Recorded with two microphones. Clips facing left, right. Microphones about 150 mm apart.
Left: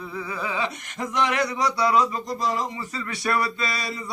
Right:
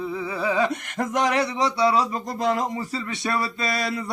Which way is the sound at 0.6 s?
50° right (ahead or behind).